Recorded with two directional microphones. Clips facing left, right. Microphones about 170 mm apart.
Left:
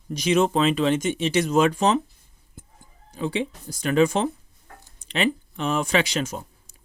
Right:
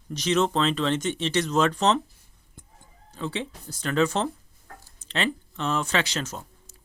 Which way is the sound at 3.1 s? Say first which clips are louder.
Left 5 dB; 15° left (ahead or behind).